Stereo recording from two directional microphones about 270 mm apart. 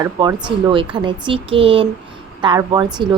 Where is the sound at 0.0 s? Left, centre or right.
Centre.